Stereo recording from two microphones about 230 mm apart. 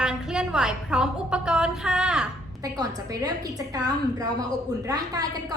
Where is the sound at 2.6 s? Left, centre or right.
Centre.